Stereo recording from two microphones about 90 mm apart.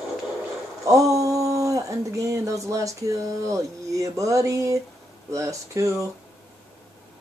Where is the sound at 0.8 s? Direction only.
40° right (ahead or behind).